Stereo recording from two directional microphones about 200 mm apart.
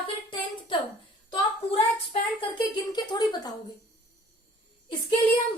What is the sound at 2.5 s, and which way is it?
Female singing, 20° left (ahead or behind).